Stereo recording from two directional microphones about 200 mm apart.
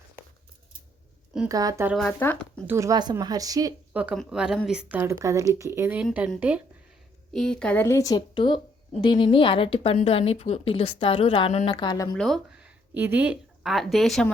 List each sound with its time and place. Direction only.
1.5 s a woman's voice: 15° right (ahead or behind)
2.0 s a woman's voice: 5° left (ahead or behind)
2.6 s a woman's voice: 15° right (ahead or behind)
7.3 s a woman's voice: 5° left (ahead or behind); by 12.0 s 20° left (ahead or behind)
12.1 s speech: centre (ahead or behind)